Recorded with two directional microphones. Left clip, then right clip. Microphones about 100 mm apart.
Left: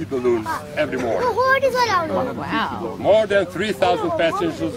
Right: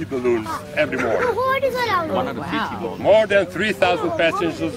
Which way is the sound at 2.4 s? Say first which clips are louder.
Left 1 dB; 45° left (ahead or behind).